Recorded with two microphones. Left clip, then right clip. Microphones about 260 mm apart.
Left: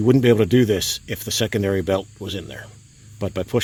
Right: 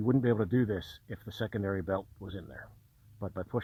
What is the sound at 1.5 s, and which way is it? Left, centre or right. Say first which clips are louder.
Speech: left 11 dB; centre.